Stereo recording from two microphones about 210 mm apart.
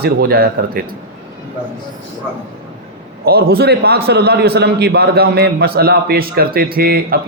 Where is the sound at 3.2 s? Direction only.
45° right (ahead or behind).